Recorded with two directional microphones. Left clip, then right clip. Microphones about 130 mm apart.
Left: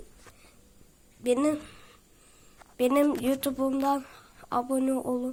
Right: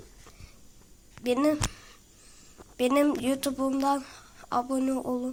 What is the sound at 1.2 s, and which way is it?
Speech, 20° left (ahead or behind).